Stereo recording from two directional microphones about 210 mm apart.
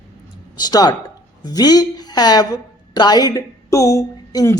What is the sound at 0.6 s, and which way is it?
A woman's voice, 20° left (ahead or behind).